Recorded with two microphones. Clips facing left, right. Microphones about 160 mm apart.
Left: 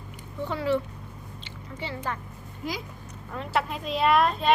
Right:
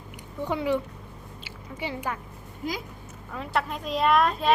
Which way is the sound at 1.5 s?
10° right (ahead or behind).